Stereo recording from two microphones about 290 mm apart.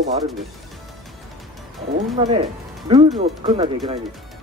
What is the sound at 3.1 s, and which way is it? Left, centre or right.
Speech, centre.